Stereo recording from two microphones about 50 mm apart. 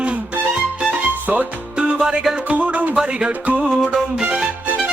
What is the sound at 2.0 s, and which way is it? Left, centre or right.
Music, centre.